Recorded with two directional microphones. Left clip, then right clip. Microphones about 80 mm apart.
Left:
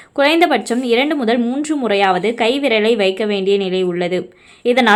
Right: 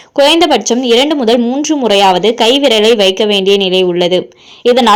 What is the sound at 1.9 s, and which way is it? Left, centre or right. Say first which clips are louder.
A woman's voice: right 7 dB; right.